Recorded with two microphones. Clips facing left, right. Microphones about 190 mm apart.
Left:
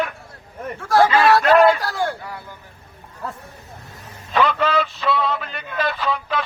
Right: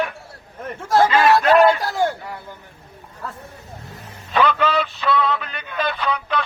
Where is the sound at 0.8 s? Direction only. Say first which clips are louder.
Even; 20° right (ahead or behind).